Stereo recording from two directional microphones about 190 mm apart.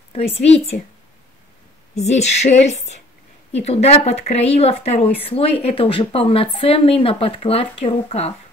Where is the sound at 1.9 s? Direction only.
35° left (ahead or behind).